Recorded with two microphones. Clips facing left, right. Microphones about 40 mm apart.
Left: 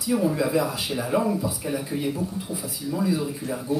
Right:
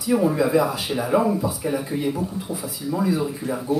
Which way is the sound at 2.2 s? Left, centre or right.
Right.